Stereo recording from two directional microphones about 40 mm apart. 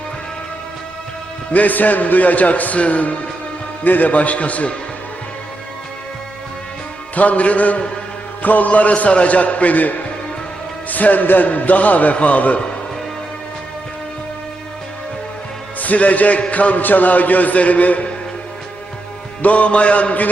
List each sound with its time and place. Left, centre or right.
1.5 s a man's voice: left
7.2 s a man's voice: left
15.8 s a man's voice: left
19.4 s a man's voice: left